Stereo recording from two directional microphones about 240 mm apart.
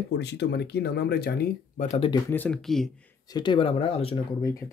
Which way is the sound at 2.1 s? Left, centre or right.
Centre.